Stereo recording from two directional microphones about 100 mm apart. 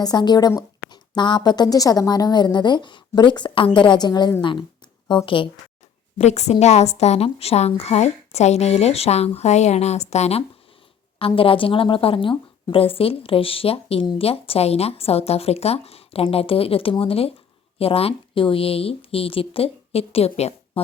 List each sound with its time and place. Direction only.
0.0 s a woman's voice: 45° left (ahead or behind)
6.1 s a woman's voice: 90° left
11.2 s speech: 65° left (ahead or behind); by 20.8 s 85° left